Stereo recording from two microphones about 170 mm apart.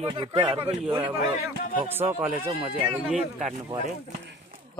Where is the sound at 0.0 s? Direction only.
30° right (ahead or behind).